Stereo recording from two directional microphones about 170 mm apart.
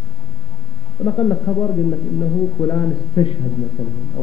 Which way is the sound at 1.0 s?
25° left (ahead or behind).